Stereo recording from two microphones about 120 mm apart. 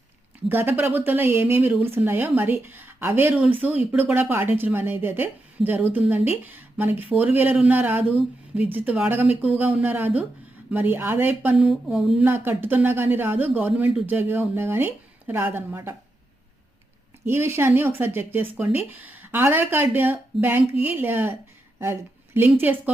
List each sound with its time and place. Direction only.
0.4 s a woman's voice: 20° right (ahead or behind); by 12.2 s 5° right (ahead or behind)
12.2 s a woman's voice: 20° right (ahead or behind)
17.2 s a woman's voice: 20° right (ahead or behind)
22.4 s a woman's voice: 15° right (ahead or behind)